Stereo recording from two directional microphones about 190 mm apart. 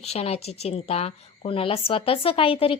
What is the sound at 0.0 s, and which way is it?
A woman's voice, 35° left (ahead or behind).